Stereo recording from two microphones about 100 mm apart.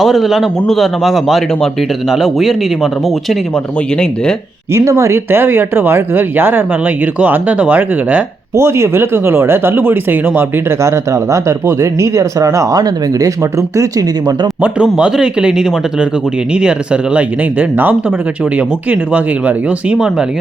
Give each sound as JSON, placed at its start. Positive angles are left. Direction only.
{"t": 0.0, "sound": "speech", "side_deg": 0}
{"t": 4.7, "sound": "speech", "side_deg": -30}
{"t": 8.5, "sound": "speech", "side_deg": -25}
{"t": 14.9, "sound": "speech", "side_deg": -10}